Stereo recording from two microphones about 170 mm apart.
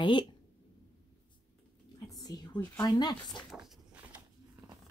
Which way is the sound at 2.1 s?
20° left (ahead or behind).